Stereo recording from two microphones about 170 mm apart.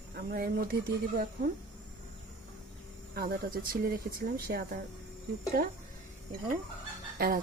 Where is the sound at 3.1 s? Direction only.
60° right (ahead or behind).